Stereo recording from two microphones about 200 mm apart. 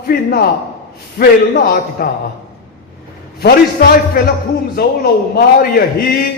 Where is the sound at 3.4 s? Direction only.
45° left (ahead or behind).